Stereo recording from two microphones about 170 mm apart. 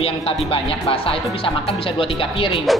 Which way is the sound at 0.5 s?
35° left (ahead or behind).